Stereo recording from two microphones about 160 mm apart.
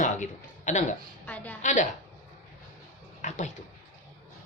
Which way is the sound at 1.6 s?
55° left (ahead or behind).